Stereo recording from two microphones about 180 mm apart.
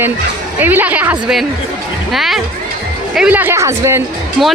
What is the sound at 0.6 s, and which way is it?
A woman's voice, 10° right (ahead or behind).